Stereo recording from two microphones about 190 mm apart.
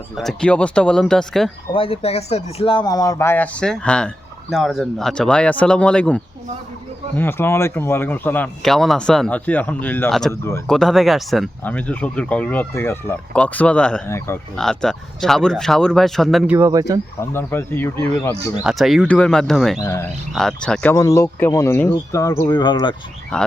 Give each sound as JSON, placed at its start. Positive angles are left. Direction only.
{"t": 0.2, "sound": "speech", "side_deg": 5}
{"t": 1.7, "sound": "speech", "side_deg": 30}
{"t": 16.6, "sound": "speech", "side_deg": -15}
{"t": 17.2, "sound": "speech", "side_deg": 10}
{"t": 18.6, "sound": "speech", "side_deg": 0}
{"t": 19.8, "sound": "speech", "side_deg": 15}
{"t": 20.3, "sound": "speech", "side_deg": 0}
{"t": 20.9, "sound": "speech", "side_deg": 15}
{"t": 23.3, "sound": "speech", "side_deg": 5}